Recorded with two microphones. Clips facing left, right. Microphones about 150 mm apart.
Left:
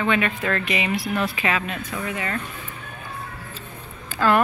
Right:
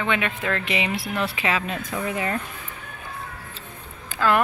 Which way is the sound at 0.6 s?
25° right (ahead or behind).